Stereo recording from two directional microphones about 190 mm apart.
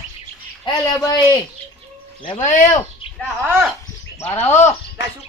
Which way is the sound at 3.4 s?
10° right (ahead or behind).